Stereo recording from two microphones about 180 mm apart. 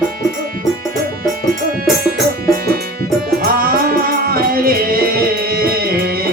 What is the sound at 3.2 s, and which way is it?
Music, 55° right (ahead or behind).